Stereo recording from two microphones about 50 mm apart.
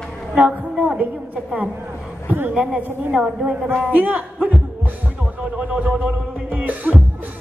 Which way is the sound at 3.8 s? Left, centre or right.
Right.